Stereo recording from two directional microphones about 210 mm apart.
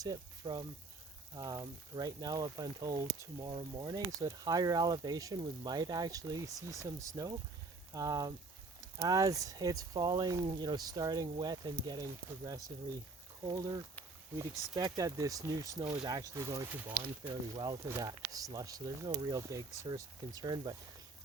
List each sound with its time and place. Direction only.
0.0 s speech: 20° right (ahead or behind)